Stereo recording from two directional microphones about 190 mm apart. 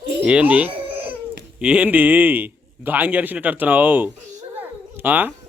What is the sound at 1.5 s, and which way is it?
A man's voice, 5° right (ahead or behind).